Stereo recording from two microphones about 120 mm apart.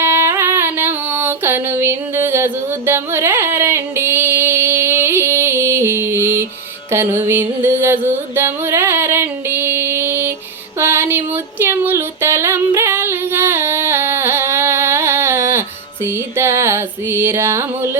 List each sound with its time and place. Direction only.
0.0 s music: 20° right (ahead or behind)
10.8 s a sound: 20° right (ahead or behind)
11.6 s female singing: 20° right (ahead or behind)
16.0 s music: 20° right (ahead or behind)